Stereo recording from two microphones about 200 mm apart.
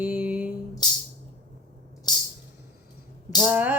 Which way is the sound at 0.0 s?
5° right (ahead or behind).